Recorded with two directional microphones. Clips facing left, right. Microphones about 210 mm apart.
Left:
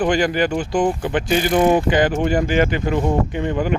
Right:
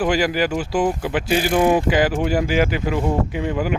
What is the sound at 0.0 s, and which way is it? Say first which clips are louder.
Speech: left 1 dB; 5° right (ahead or behind).